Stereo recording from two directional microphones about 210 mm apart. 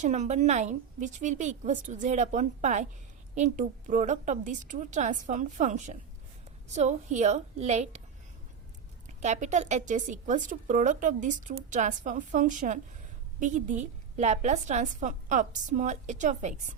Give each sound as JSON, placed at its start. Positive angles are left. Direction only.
{"t": 0.0, "sound": "a woman's voice", "side_deg": -35}
{"t": 9.0, "sound": "a woman's voice", "side_deg": -35}